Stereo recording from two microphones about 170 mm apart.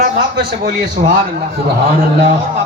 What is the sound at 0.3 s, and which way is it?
Speech, 65° right (ahead or behind).